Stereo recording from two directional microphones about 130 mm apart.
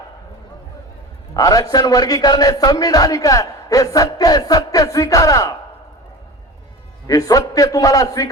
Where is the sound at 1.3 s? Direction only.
30° left (ahead or behind).